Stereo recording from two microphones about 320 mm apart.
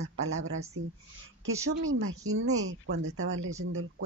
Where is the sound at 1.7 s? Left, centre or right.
Right.